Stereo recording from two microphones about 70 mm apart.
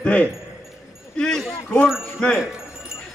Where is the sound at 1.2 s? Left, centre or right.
Centre.